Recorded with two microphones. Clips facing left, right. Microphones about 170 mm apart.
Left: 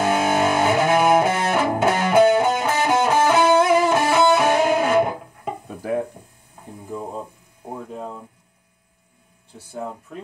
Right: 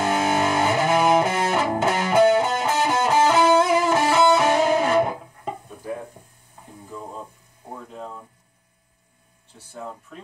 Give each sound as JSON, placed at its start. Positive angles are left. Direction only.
{"t": 0.0, "sound": "music", "side_deg": 5}
{"t": 5.8, "sound": "hum", "side_deg": 80}